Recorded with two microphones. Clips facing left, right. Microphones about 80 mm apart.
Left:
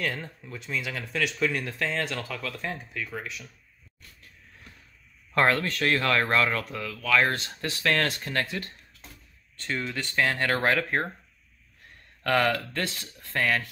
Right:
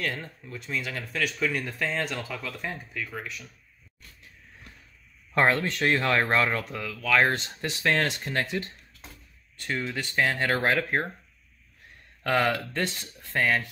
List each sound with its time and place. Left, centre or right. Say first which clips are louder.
0.5 s speech: even; centre
1.7 s speech: even; centre
2.6 s speech: left 1 dB; centre
5.3 s speech: even; right
12.2 s speech: left 1 dB; centre